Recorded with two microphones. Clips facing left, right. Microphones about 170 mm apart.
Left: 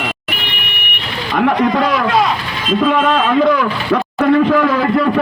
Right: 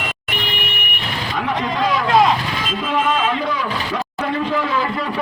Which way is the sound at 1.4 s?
60° left (ahead or behind).